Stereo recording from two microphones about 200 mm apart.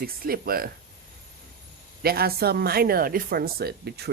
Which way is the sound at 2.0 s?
50° right (ahead or behind).